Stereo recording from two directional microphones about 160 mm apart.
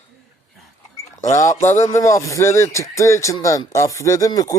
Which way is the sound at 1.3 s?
20° left (ahead or behind).